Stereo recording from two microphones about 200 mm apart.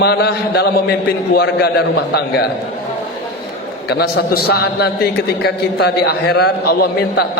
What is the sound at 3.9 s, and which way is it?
A man's voice, 50° left (ahead or behind).